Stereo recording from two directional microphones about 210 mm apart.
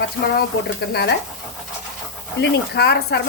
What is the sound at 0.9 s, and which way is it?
Speech, 50° left (ahead or behind).